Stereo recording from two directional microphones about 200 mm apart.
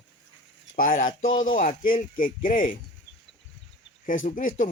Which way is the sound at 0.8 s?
40° left (ahead or behind).